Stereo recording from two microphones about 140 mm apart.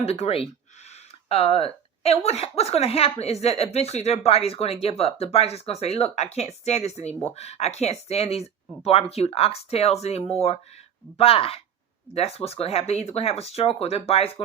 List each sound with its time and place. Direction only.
0.0 s speech: 45° left (ahead or behind)